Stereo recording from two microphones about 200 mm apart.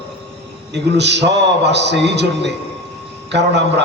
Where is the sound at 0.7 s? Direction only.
60° right (ahead or behind).